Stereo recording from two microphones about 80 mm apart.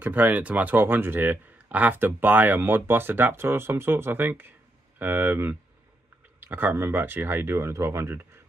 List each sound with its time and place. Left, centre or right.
0.0 s speech: right